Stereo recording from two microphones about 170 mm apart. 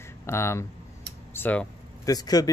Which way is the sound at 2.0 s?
20° left (ahead or behind).